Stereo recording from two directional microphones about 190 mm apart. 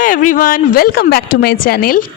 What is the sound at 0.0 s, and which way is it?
Speech, 45° left (ahead or behind).